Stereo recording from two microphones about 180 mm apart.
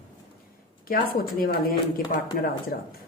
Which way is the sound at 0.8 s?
50° left (ahead or behind).